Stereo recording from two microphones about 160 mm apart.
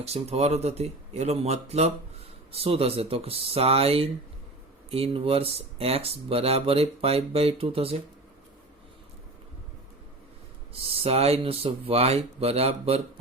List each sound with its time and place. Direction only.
0.0 s speech: 40° right (ahead or behind)
10.8 s speech: 40° right (ahead or behind)